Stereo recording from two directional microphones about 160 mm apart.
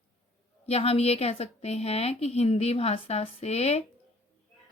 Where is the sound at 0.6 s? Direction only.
40° left (ahead or behind).